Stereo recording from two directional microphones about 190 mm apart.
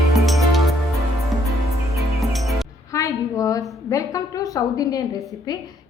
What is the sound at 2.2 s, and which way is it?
Music, centre (ahead or behind).